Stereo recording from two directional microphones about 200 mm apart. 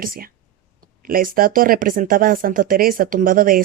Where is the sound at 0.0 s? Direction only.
45° right (ahead or behind).